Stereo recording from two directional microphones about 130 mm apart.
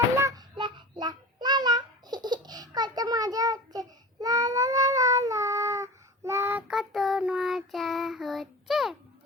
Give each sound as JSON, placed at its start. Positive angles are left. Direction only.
{"t": 0.2, "sound": "child singing", "side_deg": -25}
{"t": 0.5, "sound": "child singing", "side_deg": -35}